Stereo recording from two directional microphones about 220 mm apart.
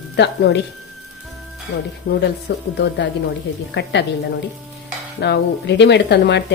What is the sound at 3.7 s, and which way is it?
Speech, 50° left (ahead or behind).